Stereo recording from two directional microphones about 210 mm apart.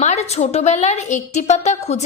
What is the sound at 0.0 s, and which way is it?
A woman's voice, 30° left (ahead or behind).